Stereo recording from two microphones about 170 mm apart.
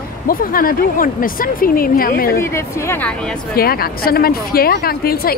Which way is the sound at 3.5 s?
60° left (ahead or behind).